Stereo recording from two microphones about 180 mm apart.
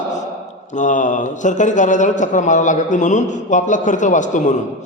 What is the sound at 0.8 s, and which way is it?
A man's voice, 45° left (ahead or behind).